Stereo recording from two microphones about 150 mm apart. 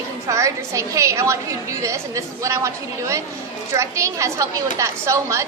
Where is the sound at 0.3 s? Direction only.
20° right (ahead or behind).